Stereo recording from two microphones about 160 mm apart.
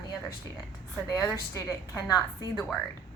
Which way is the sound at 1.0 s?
20° left (ahead or behind).